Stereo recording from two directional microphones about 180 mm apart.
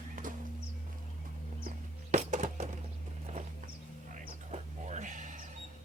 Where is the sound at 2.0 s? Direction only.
40° right (ahead or behind).